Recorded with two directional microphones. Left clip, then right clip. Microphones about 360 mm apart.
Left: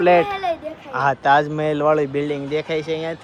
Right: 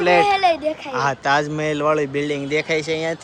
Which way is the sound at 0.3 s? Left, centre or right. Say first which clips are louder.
Right 7 dB; centre.